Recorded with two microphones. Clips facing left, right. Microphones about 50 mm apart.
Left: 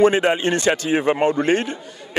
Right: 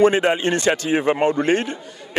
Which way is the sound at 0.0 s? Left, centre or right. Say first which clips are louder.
Even; left.